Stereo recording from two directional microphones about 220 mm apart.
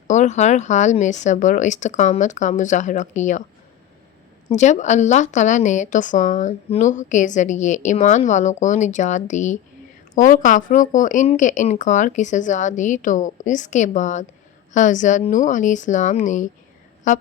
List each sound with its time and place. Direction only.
0.1 s a woman's voice: 35° left (ahead or behind)
4.4 s a woman's voice: 30° left (ahead or behind)